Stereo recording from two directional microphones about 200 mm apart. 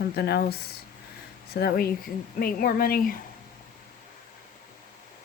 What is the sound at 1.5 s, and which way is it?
Speech, 50° left (ahead or behind).